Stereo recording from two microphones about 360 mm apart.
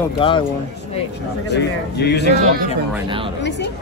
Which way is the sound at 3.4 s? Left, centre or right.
Left.